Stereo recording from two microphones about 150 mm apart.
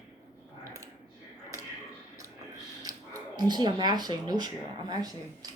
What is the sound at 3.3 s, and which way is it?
Speech, 30° right (ahead or behind).